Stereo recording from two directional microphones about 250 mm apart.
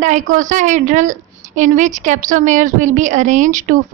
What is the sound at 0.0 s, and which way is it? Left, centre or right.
A woman's voice, right.